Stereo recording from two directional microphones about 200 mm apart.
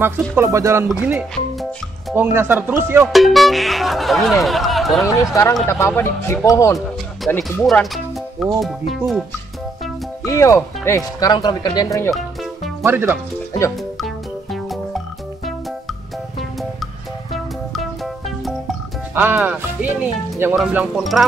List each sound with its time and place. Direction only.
0.0 s music: 15° right (ahead or behind)
1.0 s speech: centre (ahead or behind)
2.3 s music: 10° right (ahead or behind)
3.1 s speech: centre (ahead or behind)
5.3 s speech: 15° left (ahead or behind); by 9.2 s centre (ahead or behind)
10.2 s speech: 15° left (ahead or behind)
12.8 s music: 10° right (ahead or behind)
13.5 s music: 15° left (ahead or behind)
13.9 s music: centre (ahead or behind)
18.4 s music: 5° right (ahead or behind)
20.5 s speech: 5° right (ahead or behind)